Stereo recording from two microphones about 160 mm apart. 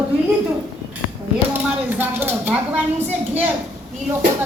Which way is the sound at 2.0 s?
15° right (ahead or behind).